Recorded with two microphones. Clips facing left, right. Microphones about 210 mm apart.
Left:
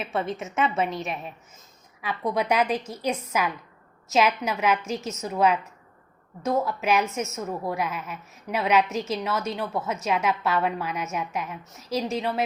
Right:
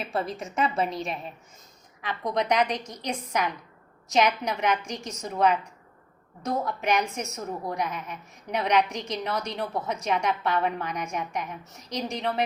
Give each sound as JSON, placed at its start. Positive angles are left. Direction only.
{"t": 0.0, "sound": "a woman's voice", "side_deg": 0}